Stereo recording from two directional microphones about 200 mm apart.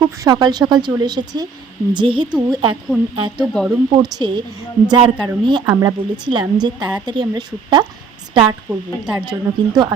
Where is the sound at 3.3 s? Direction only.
Centre (ahead or behind).